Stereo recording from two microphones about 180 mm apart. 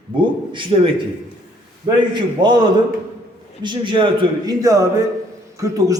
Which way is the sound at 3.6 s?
25° right (ahead or behind).